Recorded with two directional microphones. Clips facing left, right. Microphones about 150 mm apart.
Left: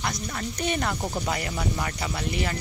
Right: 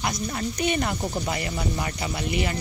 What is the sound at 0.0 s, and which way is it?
Speech, 20° right (ahead or behind).